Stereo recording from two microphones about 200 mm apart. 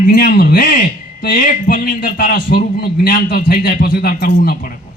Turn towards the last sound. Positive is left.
turn(degrees=45)  # may be behind; listen again after turning